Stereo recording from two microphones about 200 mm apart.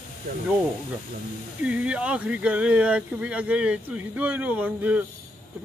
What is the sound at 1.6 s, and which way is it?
Speech, 5° right (ahead or behind).